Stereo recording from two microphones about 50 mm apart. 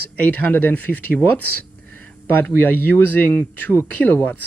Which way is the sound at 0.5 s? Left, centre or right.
Left.